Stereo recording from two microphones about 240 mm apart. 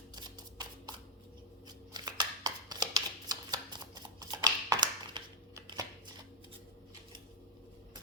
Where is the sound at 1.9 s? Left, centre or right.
Centre.